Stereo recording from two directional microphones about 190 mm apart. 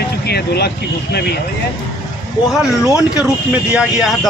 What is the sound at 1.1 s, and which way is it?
Speech, 55° left (ahead or behind).